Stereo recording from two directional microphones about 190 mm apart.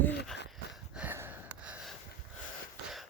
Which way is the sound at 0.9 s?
10° right (ahead or behind).